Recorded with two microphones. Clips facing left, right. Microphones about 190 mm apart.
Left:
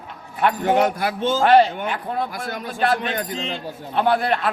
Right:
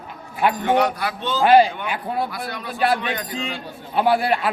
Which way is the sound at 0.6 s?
45° left (ahead or behind).